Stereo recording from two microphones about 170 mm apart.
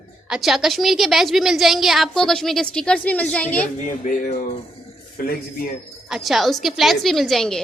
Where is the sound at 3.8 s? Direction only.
50° left (ahead or behind).